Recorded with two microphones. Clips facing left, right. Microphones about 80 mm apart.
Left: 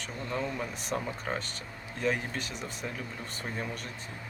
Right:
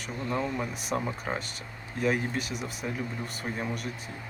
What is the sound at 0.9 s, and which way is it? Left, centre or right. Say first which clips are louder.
Speech: right 2 dB; centre.